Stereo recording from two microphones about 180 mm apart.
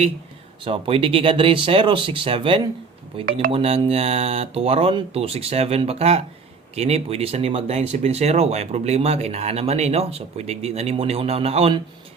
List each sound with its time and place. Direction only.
0.6 s speech: 30° right (ahead or behind)